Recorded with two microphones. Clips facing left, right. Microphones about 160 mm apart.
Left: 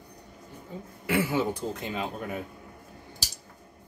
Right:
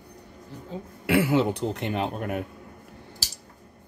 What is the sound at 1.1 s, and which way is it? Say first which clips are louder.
A man's voice: right 5 dB; 70° right (ahead or behind).